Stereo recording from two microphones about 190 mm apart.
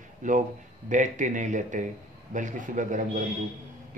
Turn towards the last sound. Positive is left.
turn(degrees=-40)  # may be behind; listen again after turning